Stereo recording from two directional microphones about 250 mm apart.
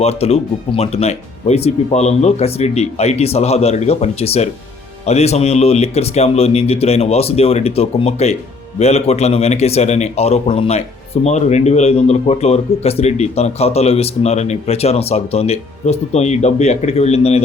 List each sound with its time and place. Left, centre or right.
0.0 s a man's voice: left